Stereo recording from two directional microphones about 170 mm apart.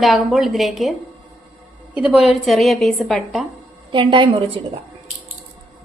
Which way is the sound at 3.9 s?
30° right (ahead or behind).